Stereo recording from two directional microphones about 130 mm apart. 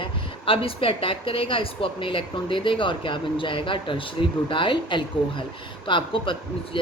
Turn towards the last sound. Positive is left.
turn(degrees=40)  # may be behind; listen again after turning